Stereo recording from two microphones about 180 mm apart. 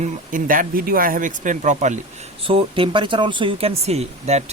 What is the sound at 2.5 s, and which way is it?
Speech, 30° right (ahead or behind).